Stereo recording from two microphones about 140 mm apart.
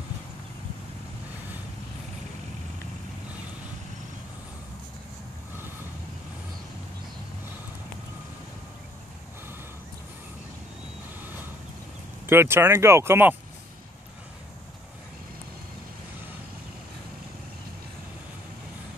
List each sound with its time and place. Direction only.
12.3 s speech: 15° right (ahead or behind)